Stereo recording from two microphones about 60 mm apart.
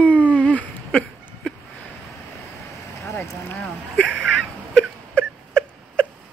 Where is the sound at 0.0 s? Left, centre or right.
Left.